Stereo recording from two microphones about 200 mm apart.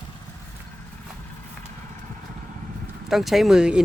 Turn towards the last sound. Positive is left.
turn(degrees=-5)  # may be behind; listen again after turning